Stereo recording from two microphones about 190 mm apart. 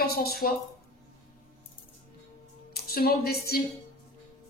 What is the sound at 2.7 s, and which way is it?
Speech, 55° left (ahead or behind).